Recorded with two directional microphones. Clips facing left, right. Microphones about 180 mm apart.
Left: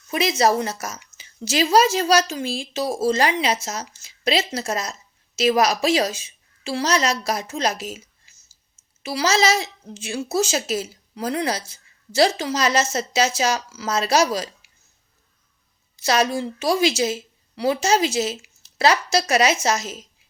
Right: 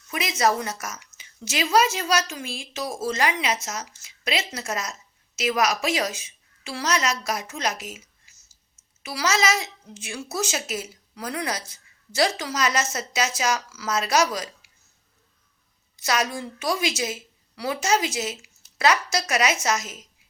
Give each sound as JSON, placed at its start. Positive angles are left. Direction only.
{"t": 0.1, "sound": "a woman's voice", "side_deg": 30}
{"t": 16.0, "sound": "a woman's voice", "side_deg": 30}